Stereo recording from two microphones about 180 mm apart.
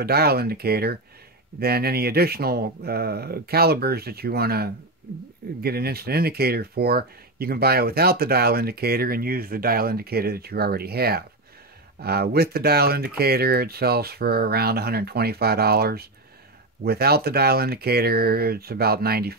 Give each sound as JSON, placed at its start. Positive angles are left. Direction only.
{"t": 0.0, "sound": "speech", "side_deg": -60}